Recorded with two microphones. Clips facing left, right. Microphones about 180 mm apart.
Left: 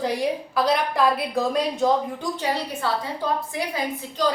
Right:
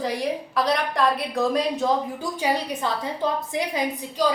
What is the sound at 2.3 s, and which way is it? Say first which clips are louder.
A woman's voice: right 2 dB; 15° right (ahead or behind).